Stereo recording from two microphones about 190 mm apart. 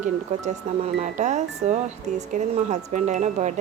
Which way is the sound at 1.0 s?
40° right (ahead or behind).